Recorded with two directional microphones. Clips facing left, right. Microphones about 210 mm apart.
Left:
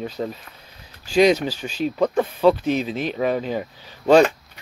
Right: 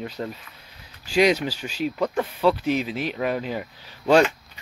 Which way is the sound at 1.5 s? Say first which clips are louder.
Left 2 dB; 10° right (ahead or behind).